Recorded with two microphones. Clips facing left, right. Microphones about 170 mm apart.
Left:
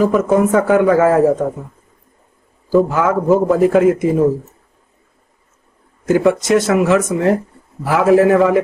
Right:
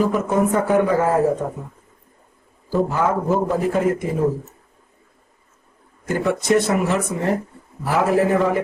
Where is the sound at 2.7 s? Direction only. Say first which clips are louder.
Left 6 dB; 90° left.